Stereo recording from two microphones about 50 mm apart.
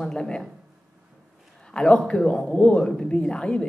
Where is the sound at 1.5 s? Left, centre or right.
Centre.